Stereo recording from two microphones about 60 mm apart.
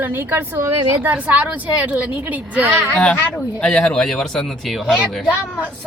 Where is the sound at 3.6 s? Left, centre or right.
Centre.